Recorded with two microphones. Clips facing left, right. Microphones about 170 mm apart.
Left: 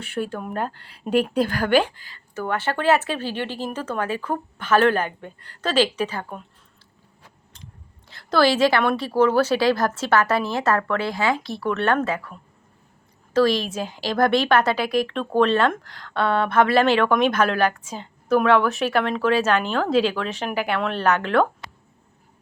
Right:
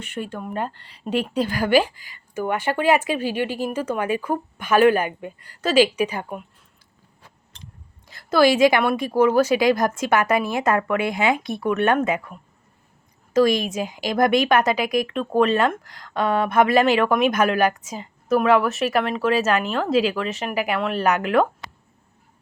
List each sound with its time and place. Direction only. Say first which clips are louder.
0.1 s speech: left 2 dB; centre (ahead or behind)
1.5 s speech: right 1 dB; 10° right (ahead or behind)
8.0 s speech: right 2 dB; 10° right (ahead or behind)
13.3 s speech: right 1 dB; 10° right (ahead or behind)